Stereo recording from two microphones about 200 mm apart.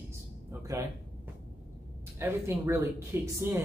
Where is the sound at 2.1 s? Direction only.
15° right (ahead or behind).